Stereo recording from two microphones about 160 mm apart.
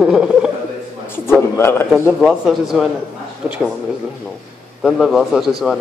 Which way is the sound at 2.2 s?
Centre (ahead or behind).